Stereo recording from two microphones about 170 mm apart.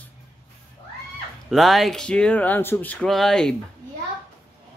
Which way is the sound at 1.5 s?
Centre (ahead or behind).